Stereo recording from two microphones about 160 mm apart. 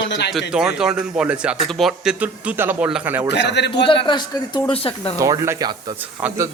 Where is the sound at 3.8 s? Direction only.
30° left (ahead or behind).